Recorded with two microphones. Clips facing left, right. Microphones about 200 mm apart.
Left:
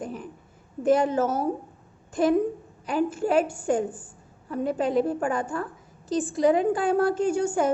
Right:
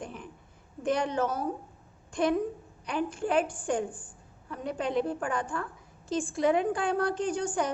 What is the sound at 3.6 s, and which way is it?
Speech, 40° left (ahead or behind).